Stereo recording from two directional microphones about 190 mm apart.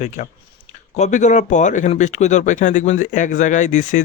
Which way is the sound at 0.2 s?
40° left (ahead or behind).